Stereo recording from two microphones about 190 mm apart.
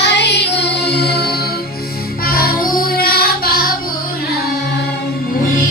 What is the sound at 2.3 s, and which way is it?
Music, 50° left (ahead or behind).